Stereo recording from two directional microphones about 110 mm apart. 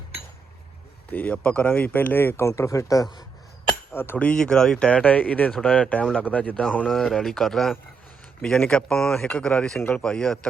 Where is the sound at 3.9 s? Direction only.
20° left (ahead or behind).